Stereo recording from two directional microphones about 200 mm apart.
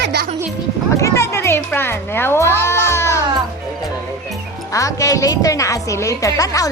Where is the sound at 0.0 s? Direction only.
55° right (ahead or behind).